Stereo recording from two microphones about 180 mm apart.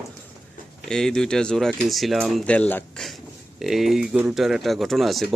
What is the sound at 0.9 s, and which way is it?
Speech, 5° left (ahead or behind).